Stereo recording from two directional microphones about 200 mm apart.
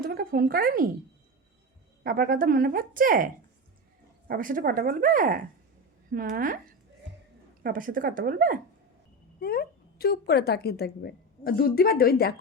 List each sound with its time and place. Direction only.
0.0 s speech: 45° right (ahead or behind)
2.0 s speech: 45° right (ahead or behind)
7.6 s speech: 45° right (ahead or behind)
9.4 s speech: 50° left (ahead or behind)